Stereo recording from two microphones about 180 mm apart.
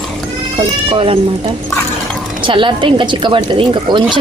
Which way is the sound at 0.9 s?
30° right (ahead or behind).